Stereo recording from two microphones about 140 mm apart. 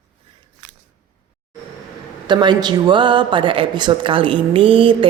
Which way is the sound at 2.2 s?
35° right (ahead or behind).